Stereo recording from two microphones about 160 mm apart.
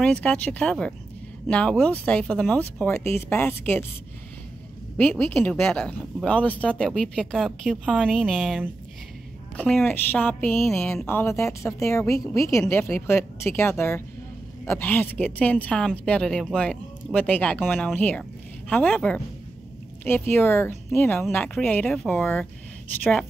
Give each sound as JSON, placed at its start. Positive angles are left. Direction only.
{"t": 0.0, "sound": "a woman's voice", "side_deg": 5}
{"t": 4.9, "sound": "a woman's voice", "side_deg": 10}
{"t": 11.1, "sound": "a woman's voice", "side_deg": 15}